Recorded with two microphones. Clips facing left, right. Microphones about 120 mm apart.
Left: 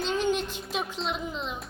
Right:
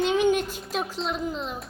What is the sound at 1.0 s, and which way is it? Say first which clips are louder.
Speech: right 3 dB; centre (ahead or behind).